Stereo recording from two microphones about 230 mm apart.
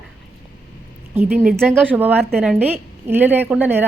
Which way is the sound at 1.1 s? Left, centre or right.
Centre.